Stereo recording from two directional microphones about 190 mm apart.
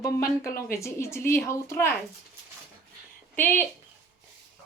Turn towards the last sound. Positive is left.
turn(degrees=10)  # may be behind; listen again after turning